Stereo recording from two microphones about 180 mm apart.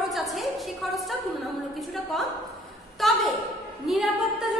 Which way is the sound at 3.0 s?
Centre (ahead or behind).